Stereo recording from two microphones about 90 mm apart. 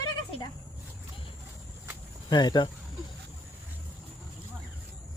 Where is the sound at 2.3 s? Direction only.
55° left (ahead or behind).